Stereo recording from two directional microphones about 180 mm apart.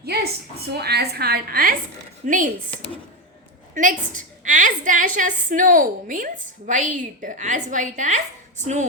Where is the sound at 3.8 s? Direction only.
45° right (ahead or behind).